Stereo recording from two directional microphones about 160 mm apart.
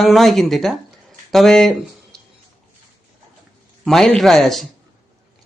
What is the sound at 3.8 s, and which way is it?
Speech, 5° left (ahead or behind).